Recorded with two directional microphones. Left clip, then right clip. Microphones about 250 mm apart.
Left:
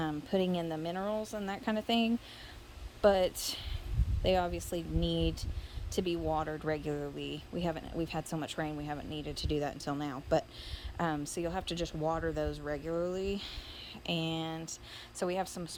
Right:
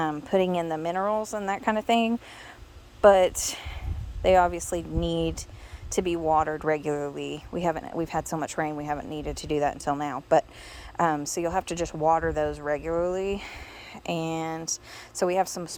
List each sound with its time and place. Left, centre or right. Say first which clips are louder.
0.0 s a woman's voice: right 9 dB; centre